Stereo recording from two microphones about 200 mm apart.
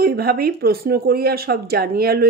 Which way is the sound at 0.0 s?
50° right (ahead or behind).